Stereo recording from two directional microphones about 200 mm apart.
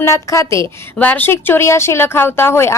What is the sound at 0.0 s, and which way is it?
Speech, 15° left (ahead or behind).